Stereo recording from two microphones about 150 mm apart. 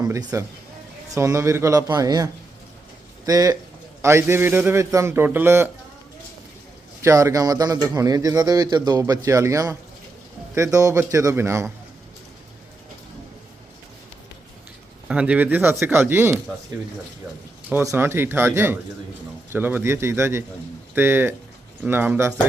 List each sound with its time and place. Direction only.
0.0 s a man's voice: 25° right (ahead or behind)
7.0 s speech: 20° right (ahead or behind)
15.0 s a man's voice: 5° right (ahead or behind)